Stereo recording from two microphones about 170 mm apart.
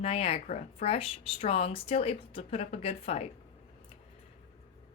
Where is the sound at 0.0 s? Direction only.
35° left (ahead or behind).